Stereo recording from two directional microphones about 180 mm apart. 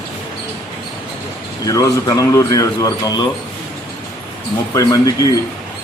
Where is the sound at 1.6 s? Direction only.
20° left (ahead or behind).